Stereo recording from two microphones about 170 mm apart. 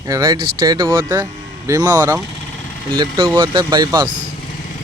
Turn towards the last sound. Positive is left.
turn(degrees=-25)  # may be behind; listen again after turning